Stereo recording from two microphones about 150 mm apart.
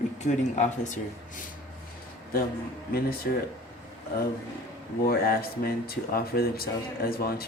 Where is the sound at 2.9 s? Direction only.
90° left.